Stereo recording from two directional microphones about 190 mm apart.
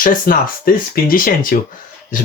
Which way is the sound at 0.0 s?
45° left (ahead or behind).